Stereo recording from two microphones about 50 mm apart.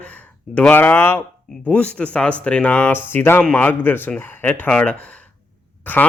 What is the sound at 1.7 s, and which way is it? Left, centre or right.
Speech, left.